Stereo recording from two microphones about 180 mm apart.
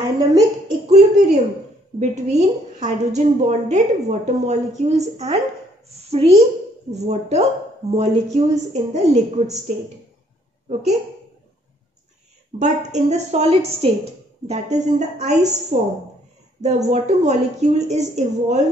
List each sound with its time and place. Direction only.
0.0 s a woman's voice: 20° right (ahead or behind)
0.8 s a woman's voice: 40° right (ahead or behind)
12.5 s a woman's voice: 40° right (ahead or behind)